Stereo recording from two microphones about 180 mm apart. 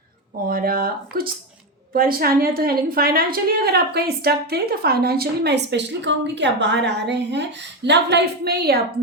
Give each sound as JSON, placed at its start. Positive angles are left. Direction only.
{"t": 0.4, "sound": "a woman's voice", "side_deg": -55}